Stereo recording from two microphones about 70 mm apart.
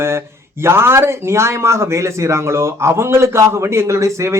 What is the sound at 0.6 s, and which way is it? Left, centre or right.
Speech, right.